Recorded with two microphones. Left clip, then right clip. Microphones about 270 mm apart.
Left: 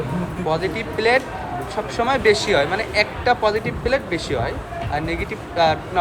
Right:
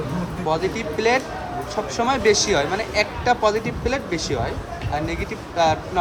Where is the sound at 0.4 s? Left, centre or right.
Right.